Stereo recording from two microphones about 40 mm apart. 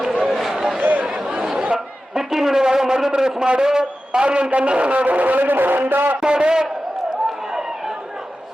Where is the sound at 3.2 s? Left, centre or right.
Centre; by 6.1 s right.